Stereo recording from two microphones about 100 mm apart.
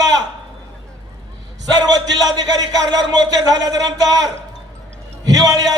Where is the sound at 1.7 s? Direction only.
40° right (ahead or behind).